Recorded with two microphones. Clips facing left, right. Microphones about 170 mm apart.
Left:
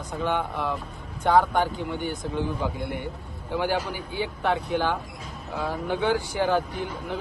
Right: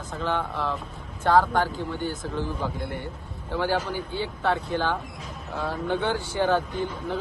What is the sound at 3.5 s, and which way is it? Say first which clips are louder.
Speech: even; 15° left (ahead or behind).